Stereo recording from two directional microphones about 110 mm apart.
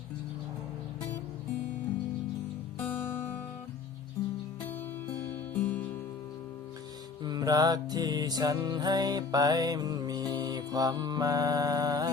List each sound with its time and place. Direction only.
2.7 s music: 20° left (ahead or behind)
5.0 s music: 15° left (ahead or behind)
7.3 s music: 35° right (ahead or behind)